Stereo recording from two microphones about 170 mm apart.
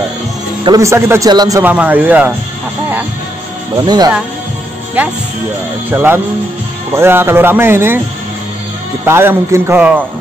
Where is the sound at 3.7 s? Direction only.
25° right (ahead or behind).